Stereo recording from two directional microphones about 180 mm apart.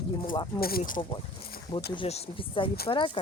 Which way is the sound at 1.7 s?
25° left (ahead or behind).